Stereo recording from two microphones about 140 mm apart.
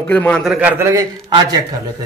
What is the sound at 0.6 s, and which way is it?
Speech, 15° right (ahead or behind).